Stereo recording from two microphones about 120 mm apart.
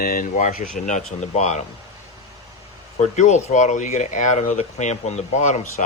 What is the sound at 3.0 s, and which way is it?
Speech, 75° left (ahead or behind).